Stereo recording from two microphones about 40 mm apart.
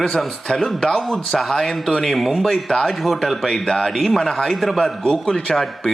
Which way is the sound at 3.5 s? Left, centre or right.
Centre.